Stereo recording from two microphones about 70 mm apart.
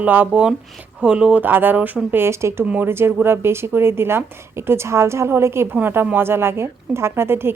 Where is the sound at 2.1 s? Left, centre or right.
Right.